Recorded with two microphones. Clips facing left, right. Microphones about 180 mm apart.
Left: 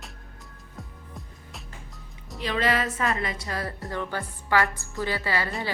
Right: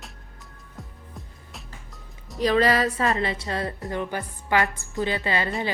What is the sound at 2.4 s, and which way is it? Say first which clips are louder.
A woman's voice: right 6 dB; 40° right (ahead or behind).